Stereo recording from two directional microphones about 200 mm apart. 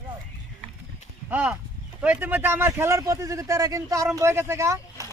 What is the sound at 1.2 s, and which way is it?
Speech, 5° right (ahead or behind).